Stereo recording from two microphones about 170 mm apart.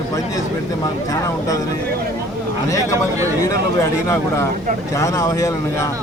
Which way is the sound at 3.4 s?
15° left (ahead or behind).